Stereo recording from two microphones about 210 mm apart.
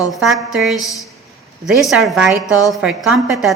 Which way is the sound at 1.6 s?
Centre (ahead or behind).